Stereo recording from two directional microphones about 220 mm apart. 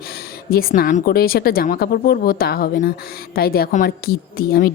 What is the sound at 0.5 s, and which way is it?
A woman's voice, 45° left (ahead or behind).